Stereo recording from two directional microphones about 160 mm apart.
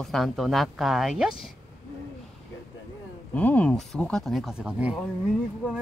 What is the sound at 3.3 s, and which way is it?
Speech, 10° left (ahead or behind).